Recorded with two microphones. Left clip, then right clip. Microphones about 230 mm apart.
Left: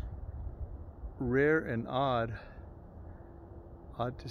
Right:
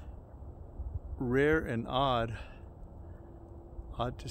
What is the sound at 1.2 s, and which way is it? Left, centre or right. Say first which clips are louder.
Speech: even; centre.